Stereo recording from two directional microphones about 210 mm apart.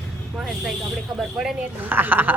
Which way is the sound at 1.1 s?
5° right (ahead or behind).